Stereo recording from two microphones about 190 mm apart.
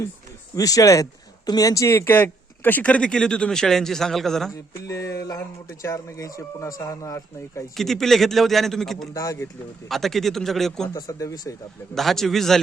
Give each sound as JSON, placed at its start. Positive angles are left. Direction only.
{"t": 0.5, "sound": "speech", "side_deg": 20}
{"t": 4.9, "sound": "speech", "side_deg": 15}
{"t": 7.8, "sound": "speech", "side_deg": 0}
{"t": 9.1, "sound": "speech", "side_deg": 15}
{"t": 9.9, "sound": "speech", "side_deg": 0}
{"t": 10.9, "sound": "speech", "side_deg": 20}
{"t": 11.9, "sound": "speech", "side_deg": 0}